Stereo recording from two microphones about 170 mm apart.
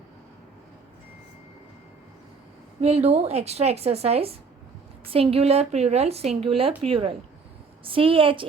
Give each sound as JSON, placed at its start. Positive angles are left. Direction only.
{"t": 2.8, "sound": "speech", "side_deg": -35}